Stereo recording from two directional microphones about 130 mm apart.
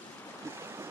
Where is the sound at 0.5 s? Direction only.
20° right (ahead or behind).